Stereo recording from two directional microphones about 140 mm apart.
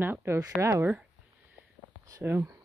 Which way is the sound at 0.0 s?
15° right (ahead or behind).